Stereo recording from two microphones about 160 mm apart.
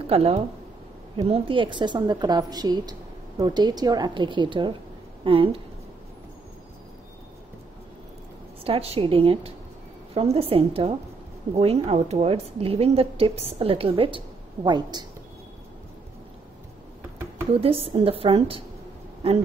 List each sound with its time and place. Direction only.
0.0 s a woman's voice: 40° right (ahead or behind)
8.6 s a woman's voice: 35° right (ahead or behind)
17.6 s a woman's voice: 35° right (ahead or behind)